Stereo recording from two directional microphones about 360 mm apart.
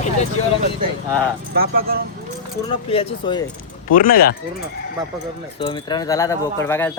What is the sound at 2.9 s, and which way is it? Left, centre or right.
Speech, centre.